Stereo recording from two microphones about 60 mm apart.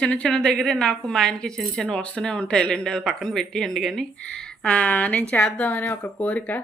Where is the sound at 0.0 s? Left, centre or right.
Centre.